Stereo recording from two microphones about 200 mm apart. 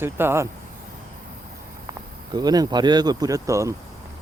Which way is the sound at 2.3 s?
20° right (ahead or behind).